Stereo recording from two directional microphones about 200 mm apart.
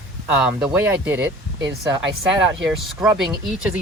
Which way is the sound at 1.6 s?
60° right (ahead or behind).